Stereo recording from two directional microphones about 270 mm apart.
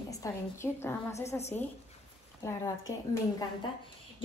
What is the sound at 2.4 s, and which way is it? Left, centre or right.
Speech, centre.